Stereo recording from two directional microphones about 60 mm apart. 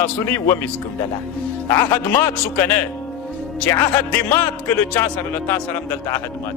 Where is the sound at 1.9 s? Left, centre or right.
Left.